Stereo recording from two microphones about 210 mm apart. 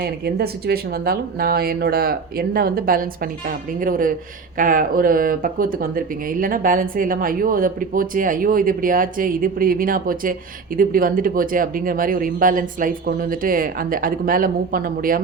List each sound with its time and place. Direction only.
0.0 s speech: 50° right (ahead or behind)